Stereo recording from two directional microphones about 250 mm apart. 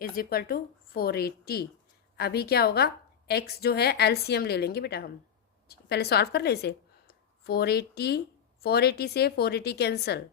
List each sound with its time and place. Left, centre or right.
0.2 s a woman's voice: left